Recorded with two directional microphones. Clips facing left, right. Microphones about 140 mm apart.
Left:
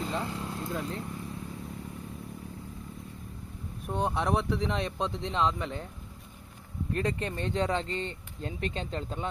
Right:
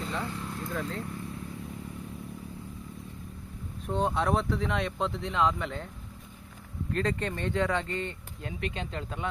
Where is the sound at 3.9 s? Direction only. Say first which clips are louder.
Right 1 dB; 15° left (ahead or behind).